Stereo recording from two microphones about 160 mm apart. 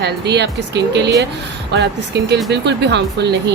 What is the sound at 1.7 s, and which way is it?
Speech, 90° right.